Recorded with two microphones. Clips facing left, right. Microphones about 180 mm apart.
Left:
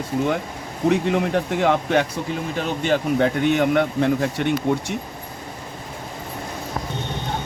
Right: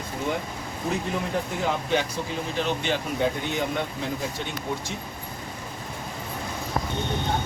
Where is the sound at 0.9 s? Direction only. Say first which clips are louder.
Left 9 dB; 75° left (ahead or behind).